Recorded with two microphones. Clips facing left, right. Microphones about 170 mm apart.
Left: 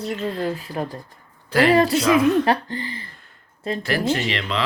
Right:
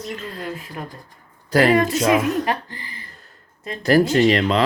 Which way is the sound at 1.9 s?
40° right (ahead or behind).